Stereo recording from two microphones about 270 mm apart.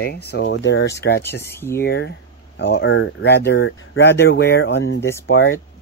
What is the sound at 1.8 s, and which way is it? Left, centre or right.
Speech, left.